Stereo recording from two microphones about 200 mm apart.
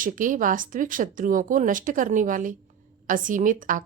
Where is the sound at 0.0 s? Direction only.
40° right (ahead or behind).